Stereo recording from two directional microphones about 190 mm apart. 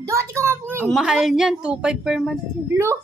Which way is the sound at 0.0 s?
15° right (ahead or behind).